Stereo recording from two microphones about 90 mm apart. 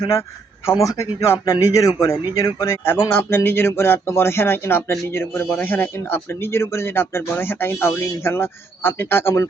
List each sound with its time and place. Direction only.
0.7 s a man's voice: 35° left (ahead or behind)
2.8 s speech: 25° left (ahead or behind)